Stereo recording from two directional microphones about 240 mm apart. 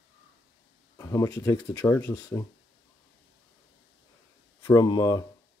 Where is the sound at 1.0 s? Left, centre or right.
Centre.